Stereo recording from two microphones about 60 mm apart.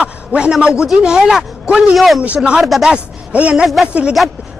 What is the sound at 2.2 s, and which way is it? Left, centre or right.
Speech, centre.